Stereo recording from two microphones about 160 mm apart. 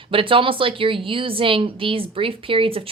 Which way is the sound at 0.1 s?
35° right (ahead or behind).